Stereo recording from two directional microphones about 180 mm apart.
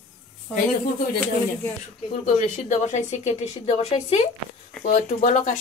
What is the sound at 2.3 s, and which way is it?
A woman's voice, 40° left (ahead or behind).